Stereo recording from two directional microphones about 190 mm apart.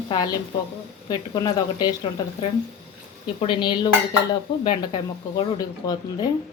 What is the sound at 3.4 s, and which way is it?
Speech, 25° left (ahead or behind).